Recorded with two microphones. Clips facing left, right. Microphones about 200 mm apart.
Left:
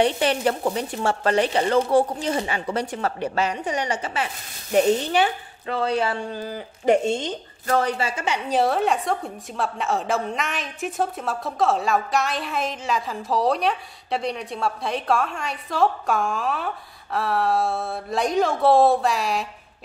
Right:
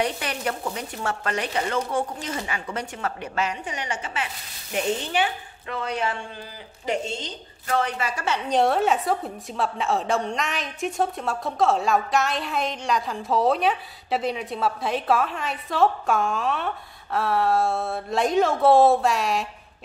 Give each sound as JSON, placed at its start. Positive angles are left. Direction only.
{"t": 0.0, "sound": "speech", "side_deg": 30}
{"t": 6.4, "sound": "a woman's voice", "side_deg": 50}
{"t": 8.1, "sound": "a woman's voice", "side_deg": 20}
{"t": 8.5, "sound": "a woman's voice", "side_deg": 0}